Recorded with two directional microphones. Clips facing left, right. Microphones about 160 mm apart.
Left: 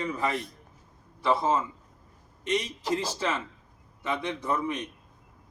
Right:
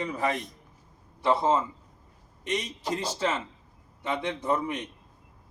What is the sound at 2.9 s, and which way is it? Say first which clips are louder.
Speech: even; 20° right (ahead or behind).